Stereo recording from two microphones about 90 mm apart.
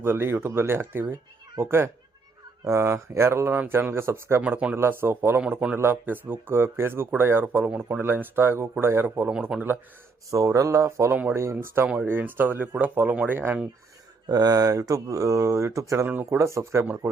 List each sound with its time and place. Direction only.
0.0 s speech: 25° right (ahead or behind)
2.6 s speech: 30° right (ahead or behind)
9.3 s speech: 10° right (ahead or behind)
10.3 s speech: 40° right (ahead or behind); by 13.7 s 20° right (ahead or behind)
14.3 s speech: 45° right (ahead or behind)
16.0 s speech: 20° right (ahead or behind)
16.4 s speech: 30° right (ahead or behind)